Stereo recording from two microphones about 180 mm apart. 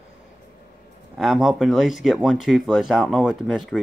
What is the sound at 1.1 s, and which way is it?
Speech, centre (ahead or behind).